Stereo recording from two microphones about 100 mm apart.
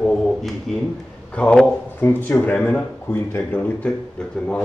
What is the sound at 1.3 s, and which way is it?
A man's voice, 10° left (ahead or behind).